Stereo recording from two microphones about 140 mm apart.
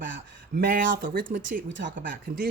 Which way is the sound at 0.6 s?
85° right.